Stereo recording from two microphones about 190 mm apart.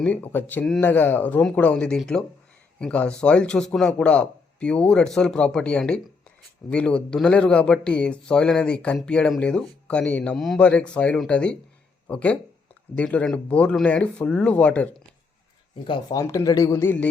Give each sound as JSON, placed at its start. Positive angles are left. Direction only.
{"t": 0.0, "sound": "speech", "side_deg": 10}
{"t": 15.7, "sound": "speech", "side_deg": 25}